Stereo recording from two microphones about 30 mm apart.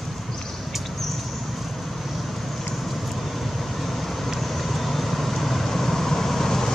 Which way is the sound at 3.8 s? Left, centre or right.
Centre.